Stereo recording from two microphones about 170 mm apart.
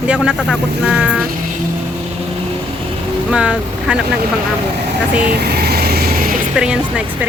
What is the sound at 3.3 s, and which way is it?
Speech, 5° right (ahead or behind).